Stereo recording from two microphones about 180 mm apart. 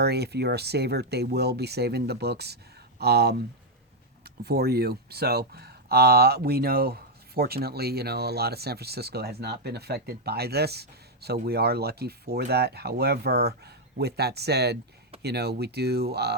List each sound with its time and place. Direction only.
0.0 s speech: 65° right (ahead or behind)
4.4 s speech: 60° right (ahead or behind)